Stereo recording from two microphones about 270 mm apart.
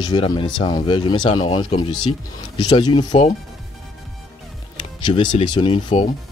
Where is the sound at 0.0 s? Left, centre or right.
Centre.